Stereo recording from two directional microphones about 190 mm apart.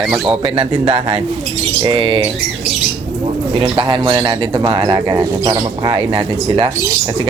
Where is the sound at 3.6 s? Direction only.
25° right (ahead or behind).